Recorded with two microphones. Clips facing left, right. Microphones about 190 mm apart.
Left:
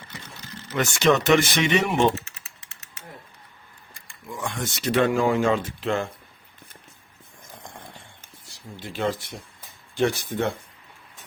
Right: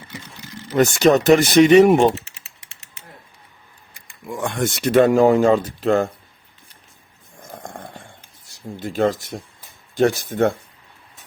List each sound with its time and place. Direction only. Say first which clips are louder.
0.1 s vehicle: right 5 dB; 15° right (ahead or behind)
0.7 s speech: right 6 dB; 40° right (ahead or behind)
4.3 s speech: right 8 dB; 55° right (ahead or behind)
7.5 s dog: right 8 dB; 50° right (ahead or behind)
8.7 s speech: right 7 dB; 45° right (ahead or behind)